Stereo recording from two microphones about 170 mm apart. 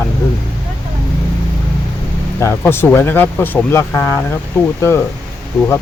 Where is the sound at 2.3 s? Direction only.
15° left (ahead or behind).